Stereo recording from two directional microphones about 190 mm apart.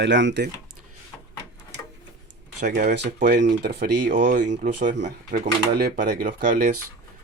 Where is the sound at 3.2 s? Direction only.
60° right (ahead or behind).